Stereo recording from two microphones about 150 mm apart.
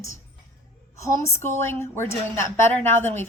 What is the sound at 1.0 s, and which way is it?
A woman's voice, 20° left (ahead or behind).